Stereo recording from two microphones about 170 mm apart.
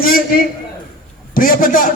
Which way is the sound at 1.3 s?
55° left (ahead or behind).